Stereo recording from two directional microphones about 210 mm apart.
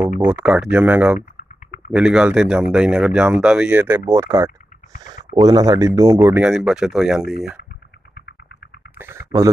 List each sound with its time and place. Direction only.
0.2 s speech: 10° right (ahead or behind)
6.4 s speech: centre (ahead or behind)
8.9 s a sound: 10° right (ahead or behind)